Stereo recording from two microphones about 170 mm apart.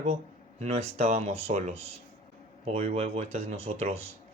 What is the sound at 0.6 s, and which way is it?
Speech, 40° right (ahead or behind).